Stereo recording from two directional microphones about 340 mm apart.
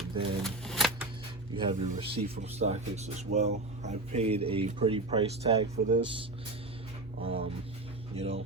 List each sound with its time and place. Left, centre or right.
0.4 s shuffling cards: centre
1.5 s speech: centre